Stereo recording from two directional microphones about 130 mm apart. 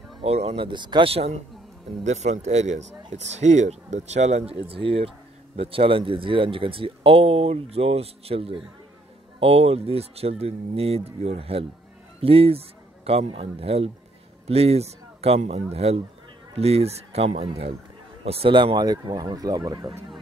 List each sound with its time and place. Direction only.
0.2 s speech: 50° right (ahead or behind)
0.7 s speech: 35° right (ahead or behind)
2.0 s a man's voice: 65° right (ahead or behind); by 19.9 s 30° right (ahead or behind)